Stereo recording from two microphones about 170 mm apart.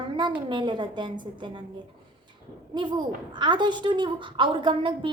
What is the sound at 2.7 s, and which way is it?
A woman's voice, 25° right (ahead or behind).